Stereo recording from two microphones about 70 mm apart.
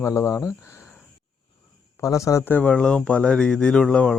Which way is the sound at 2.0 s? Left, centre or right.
Left.